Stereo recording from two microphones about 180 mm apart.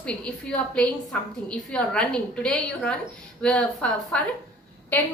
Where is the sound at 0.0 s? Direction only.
5° left (ahead or behind).